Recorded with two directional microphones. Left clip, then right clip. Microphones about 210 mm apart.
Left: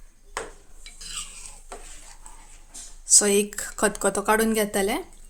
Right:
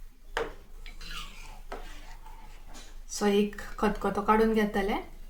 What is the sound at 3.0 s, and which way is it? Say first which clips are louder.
A woman's voice: left 6 dB; 50° left (ahead or behind).